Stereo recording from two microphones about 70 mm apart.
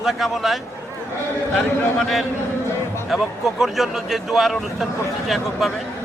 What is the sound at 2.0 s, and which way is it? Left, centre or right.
A man's voice, centre.